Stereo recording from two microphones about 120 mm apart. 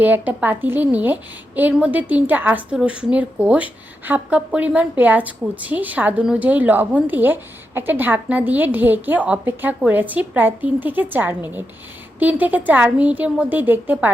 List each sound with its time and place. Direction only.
0.0 s a woman's voice: 15° right (ahead or behind)